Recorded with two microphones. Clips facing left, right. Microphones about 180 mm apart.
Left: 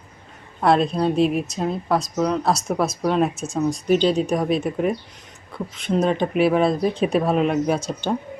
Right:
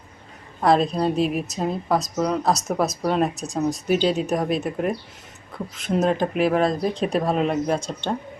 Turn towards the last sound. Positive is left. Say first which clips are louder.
# left 2 dB
turn(degrees=5)  # may be behind; listen again after turning